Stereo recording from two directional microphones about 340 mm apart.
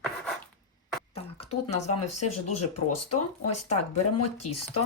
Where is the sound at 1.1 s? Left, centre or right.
Centre.